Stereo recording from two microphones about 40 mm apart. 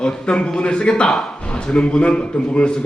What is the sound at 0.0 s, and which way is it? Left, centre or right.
A man's voice, left.